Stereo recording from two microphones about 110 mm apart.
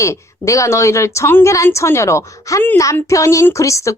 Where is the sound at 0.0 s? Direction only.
30° left (ahead or behind).